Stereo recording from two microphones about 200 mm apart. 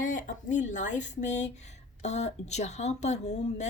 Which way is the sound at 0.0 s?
40° left (ahead or behind).